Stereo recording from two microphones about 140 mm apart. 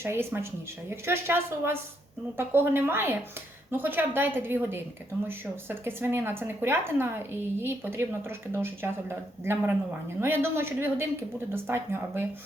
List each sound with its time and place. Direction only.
0.0 s a woman's voice: 15° right (ahead or behind)